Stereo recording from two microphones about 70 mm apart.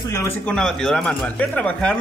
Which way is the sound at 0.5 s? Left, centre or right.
Centre.